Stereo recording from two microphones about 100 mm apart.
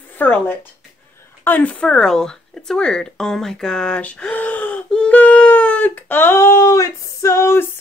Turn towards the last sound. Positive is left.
turn(degrees=30)  # may be behind; listen again after turning